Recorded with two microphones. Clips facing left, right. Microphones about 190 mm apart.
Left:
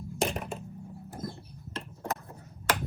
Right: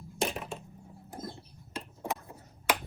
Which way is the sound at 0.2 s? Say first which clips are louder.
Left 2 dB; centre (ahead or behind).